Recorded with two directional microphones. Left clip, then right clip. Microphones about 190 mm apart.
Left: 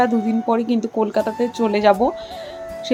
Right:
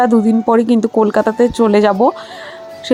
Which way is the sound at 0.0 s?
30° right (ahead or behind).